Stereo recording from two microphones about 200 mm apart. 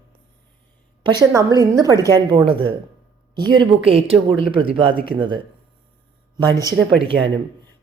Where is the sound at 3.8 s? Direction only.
30° right (ahead or behind).